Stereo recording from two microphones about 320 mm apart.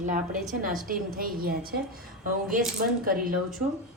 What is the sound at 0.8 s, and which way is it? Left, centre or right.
A woman's voice, right.